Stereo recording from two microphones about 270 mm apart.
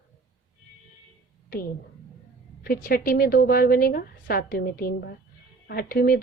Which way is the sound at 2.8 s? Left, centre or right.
Left.